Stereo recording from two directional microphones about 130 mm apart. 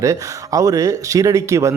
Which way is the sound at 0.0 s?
25° right (ahead or behind).